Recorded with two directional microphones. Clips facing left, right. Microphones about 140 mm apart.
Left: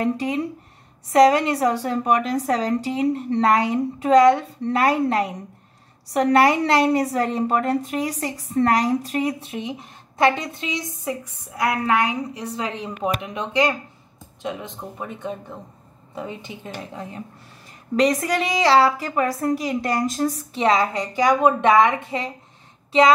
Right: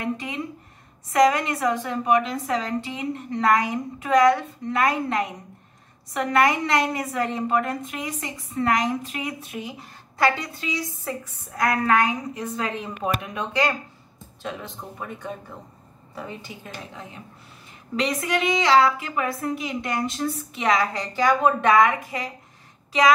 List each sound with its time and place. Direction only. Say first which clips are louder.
0.0 s a woman's voice: left 6 dB; 35° left (ahead or behind)
17.9 s a woman's voice: left 5 dB; 40° left (ahead or behind); by 22.3 s 25° left (ahead or behind)